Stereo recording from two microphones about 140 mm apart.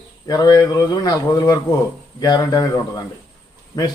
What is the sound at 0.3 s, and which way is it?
A man's voice, 25° left (ahead or behind).